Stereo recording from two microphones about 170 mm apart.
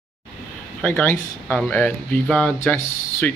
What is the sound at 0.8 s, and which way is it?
Speech, 10° left (ahead or behind).